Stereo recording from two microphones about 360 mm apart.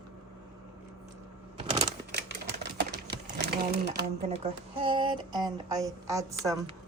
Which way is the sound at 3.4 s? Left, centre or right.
Right.